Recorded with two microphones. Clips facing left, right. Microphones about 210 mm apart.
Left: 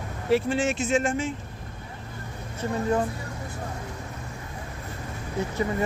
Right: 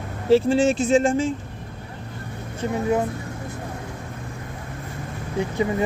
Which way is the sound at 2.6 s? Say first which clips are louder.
Right 3 dB; 15° right (ahead or behind).